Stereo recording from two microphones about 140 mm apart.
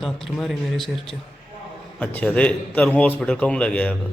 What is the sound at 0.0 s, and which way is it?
Speech, centre (ahead or behind).